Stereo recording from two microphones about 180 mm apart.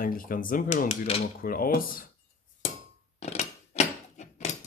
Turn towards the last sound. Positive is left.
turn(degrees=35)  # may be behind; listen again after turning